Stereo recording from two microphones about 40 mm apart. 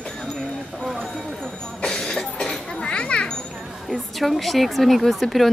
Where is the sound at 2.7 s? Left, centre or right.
Left.